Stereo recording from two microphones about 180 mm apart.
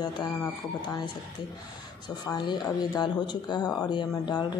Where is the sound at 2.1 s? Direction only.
25° left (ahead or behind).